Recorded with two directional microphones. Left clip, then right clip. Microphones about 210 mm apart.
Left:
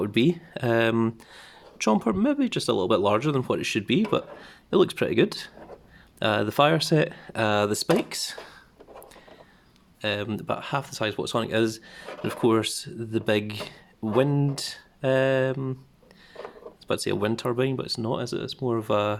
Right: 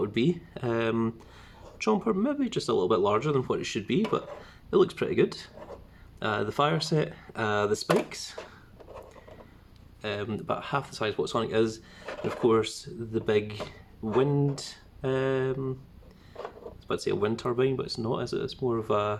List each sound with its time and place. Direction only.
0.0 s speech: 35° left (ahead or behind)
10.0 s speech: 35° left (ahead or behind)
16.9 s speech: 40° left (ahead or behind)